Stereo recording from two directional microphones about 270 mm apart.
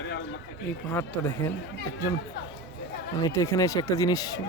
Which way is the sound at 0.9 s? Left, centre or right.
Centre.